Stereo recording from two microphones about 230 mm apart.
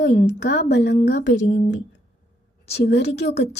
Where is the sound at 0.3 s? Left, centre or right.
Left.